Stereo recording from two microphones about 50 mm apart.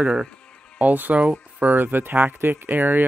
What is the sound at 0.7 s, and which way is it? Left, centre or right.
Speech, right.